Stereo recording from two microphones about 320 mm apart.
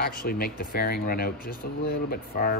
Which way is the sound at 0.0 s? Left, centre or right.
Left.